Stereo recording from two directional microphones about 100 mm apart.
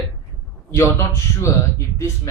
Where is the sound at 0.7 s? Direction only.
30° left (ahead or behind).